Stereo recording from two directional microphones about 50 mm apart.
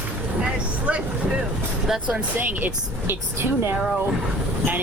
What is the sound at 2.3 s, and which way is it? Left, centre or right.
Speech, right.